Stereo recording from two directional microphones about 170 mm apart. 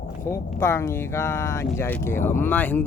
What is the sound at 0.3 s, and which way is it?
Speech, 15° left (ahead or behind).